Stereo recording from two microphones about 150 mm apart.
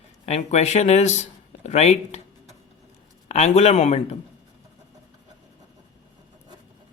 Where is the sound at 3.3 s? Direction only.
45° left (ahead or behind).